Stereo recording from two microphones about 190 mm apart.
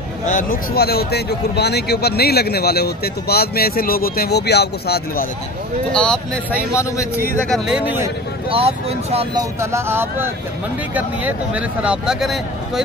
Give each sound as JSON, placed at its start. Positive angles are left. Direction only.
{"t": 0.3, "sound": "speech", "side_deg": 45}
{"t": 5.9, "sound": "speech", "side_deg": 5}
{"t": 6.7, "sound": "a man's voice", "side_deg": 15}
{"t": 7.4, "sound": "speech", "side_deg": 0}
{"t": 8.5, "sound": "speech", "side_deg": -30}
{"t": 9.4, "sound": "speech", "side_deg": -15}